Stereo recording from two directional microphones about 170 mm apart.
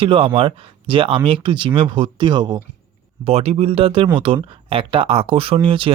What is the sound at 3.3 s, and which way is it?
Speech, 35° right (ahead or behind).